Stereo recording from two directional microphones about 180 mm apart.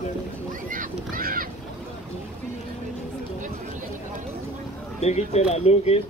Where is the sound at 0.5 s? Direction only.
50° right (ahead or behind).